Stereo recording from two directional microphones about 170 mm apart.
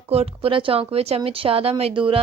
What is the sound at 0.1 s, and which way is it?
A woman's voice, 35° right (ahead or behind).